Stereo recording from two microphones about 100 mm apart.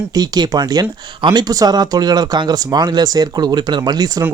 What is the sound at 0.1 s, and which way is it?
Speech, 40° right (ahead or behind).